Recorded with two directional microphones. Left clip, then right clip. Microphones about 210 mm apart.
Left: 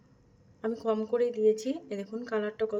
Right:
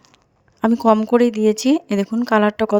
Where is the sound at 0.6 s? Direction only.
45° right (ahead or behind).